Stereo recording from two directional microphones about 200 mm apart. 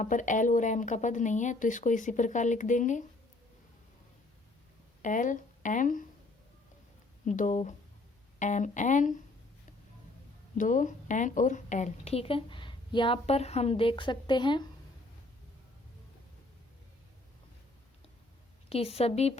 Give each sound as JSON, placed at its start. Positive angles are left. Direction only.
{"t": 0.0, "sound": "speech", "side_deg": 40}
{"t": 5.0, "sound": "speech", "side_deg": 40}
{"t": 7.3, "sound": "speech", "side_deg": 40}
{"t": 10.6, "sound": "a woman's voice", "side_deg": 40}
{"t": 18.7, "sound": "speech", "side_deg": 30}